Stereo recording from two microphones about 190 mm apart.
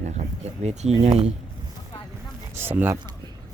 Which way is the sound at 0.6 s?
35° right (ahead or behind).